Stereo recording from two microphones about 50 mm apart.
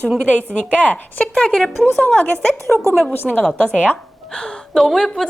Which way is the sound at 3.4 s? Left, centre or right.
Left.